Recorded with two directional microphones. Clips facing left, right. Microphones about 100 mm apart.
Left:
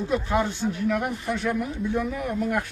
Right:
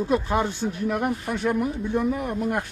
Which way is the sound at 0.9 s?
35° right (ahead or behind).